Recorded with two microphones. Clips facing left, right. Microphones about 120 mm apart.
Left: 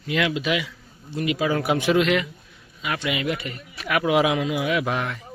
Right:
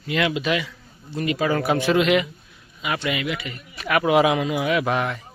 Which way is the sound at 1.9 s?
5° right (ahead or behind).